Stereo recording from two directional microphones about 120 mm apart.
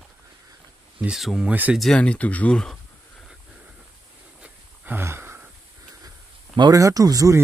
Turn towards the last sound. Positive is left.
turn(degrees=-30)  # may be behind; listen again after turning